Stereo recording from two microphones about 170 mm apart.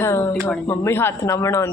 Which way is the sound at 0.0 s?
15° left (ahead or behind).